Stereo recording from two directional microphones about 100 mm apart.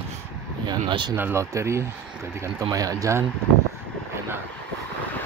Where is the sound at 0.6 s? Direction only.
55° right (ahead or behind).